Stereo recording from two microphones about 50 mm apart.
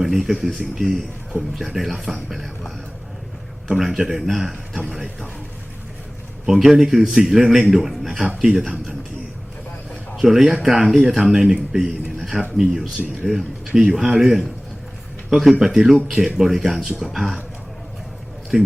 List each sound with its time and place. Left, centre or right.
0.0 s speech: centre
3.7 s speech: centre
6.4 s speech: centre
10.2 s speech: centre
12.2 s a sound: centre
12.5 s speech: centre
15.5 s speech: centre
18.5 s speech: centre